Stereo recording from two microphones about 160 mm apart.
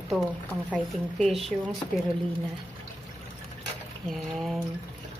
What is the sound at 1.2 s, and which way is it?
Speech, centre (ahead or behind).